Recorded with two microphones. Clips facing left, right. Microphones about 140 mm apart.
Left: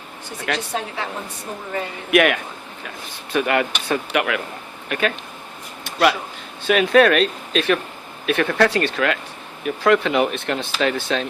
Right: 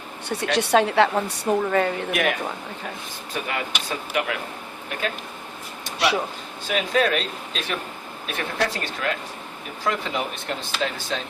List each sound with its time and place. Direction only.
0.5 s a woman's voice: 75° right (ahead or behind)
2.1 s speech: 80° left
5.8 s a sound: 65° left (ahead or behind)
6.7 s speech: 70° left (ahead or behind)